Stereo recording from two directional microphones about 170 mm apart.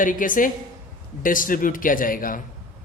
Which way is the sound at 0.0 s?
50° left (ahead or behind).